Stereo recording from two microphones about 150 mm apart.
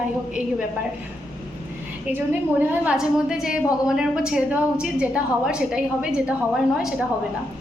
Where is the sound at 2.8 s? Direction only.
5° right (ahead or behind).